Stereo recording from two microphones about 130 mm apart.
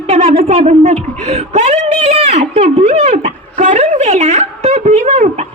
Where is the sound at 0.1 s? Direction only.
55° right (ahead or behind).